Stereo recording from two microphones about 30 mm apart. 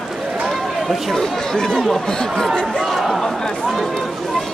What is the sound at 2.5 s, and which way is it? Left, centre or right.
Speech, left.